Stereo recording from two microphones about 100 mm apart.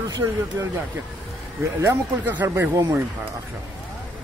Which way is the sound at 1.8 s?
20° right (ahead or behind).